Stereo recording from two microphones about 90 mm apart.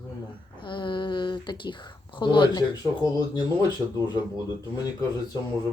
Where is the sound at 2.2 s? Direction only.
60° left (ahead or behind).